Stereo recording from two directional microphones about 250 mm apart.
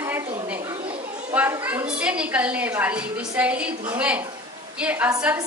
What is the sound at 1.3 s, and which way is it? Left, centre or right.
A woman's voice, centre.